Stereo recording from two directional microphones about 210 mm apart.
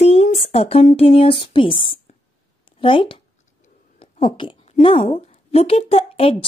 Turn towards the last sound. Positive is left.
turn(degrees=25)  # may be behind; listen again after turning